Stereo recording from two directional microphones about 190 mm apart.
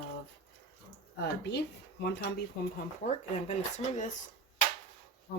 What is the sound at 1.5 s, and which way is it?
Speech, 60° left (ahead or behind).